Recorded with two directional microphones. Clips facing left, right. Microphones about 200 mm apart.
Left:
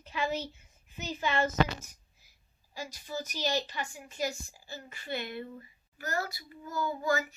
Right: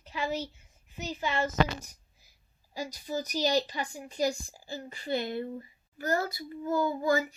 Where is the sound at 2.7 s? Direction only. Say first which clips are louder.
Right 4 dB; 40° right (ahead or behind).